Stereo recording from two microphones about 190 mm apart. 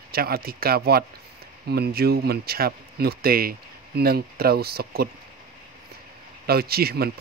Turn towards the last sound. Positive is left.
turn(degrees=-55)  # may be behind; listen again after turning